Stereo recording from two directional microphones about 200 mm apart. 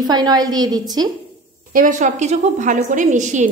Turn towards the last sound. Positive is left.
turn(degrees=-35)  # may be behind; listen again after turning